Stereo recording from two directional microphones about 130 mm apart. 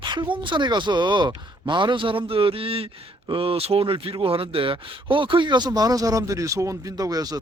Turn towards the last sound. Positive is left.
turn(degrees=-30)  # may be behind; listen again after turning